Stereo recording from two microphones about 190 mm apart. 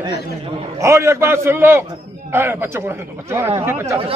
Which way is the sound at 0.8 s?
15° right (ahead or behind).